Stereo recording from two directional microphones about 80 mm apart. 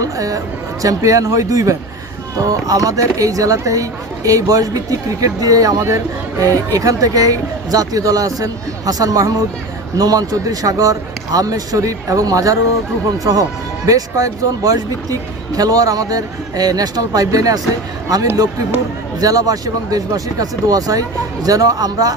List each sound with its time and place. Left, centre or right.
0.0 s speech: right